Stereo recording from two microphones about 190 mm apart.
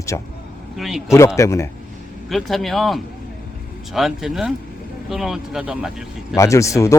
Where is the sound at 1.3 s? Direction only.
15° left (ahead or behind).